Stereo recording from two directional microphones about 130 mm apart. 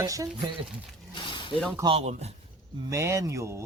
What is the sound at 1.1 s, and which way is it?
Squish, 40° left (ahead or behind).